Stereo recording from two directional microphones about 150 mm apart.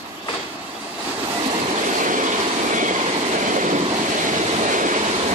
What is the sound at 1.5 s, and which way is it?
Train, 60° right (ahead or behind).